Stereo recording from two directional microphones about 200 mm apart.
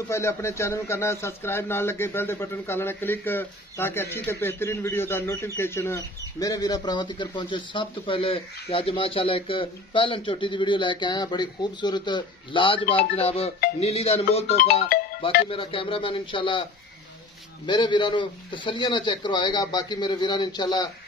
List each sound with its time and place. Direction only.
0.1 s a man's voice: 15° left (ahead or behind); by 13.5 s 30° left (ahead or behind)
13.7 s music: 30° left (ahead or behind)
15.5 s a man's voice: 25° left (ahead or behind)
17.6 s a man's voice: 20° left (ahead or behind)